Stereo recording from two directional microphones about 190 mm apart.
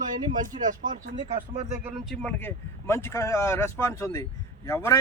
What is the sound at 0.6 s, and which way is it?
Speech, 45° right (ahead or behind).